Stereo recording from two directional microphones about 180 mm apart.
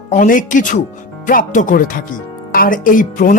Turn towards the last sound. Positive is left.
turn(degrees=45)  # may be behind; listen again after turning